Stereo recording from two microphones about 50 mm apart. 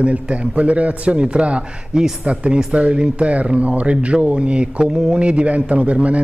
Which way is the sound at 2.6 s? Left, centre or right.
Centre.